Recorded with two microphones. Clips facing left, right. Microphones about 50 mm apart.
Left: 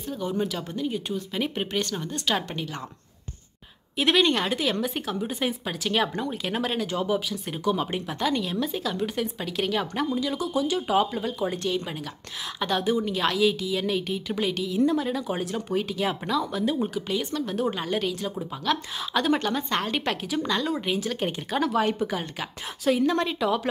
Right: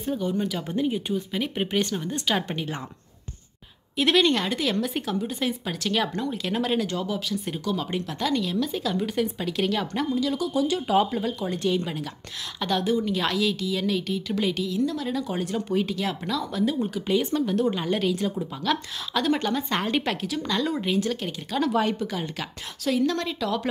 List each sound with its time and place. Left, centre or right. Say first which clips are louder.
0.2 s a woman's voice: right 1 dB; centre
0.7 s speech: right 3 dB; centre
3.9 s a woman's voice: right 1 dB; centre
14.8 s speech: left 7 dB; left
15.0 s speech: even; centre
16.9 s a woman's voice: right 4 dB; centre
17.6 s a woman's voice: right 2 dB; centre
21.9 s speech: left 1 dB; centre